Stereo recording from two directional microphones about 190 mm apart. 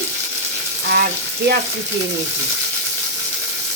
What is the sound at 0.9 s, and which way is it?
Frying, 55° right (ahead or behind).